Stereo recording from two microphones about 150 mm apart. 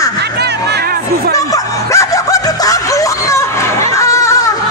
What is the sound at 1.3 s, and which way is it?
Dog, 20° left (ahead or behind).